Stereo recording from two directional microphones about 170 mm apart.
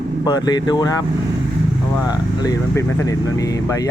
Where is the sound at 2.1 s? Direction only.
20° left (ahead or behind).